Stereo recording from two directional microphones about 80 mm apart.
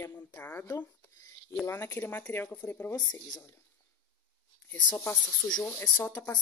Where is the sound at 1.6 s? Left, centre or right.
Left.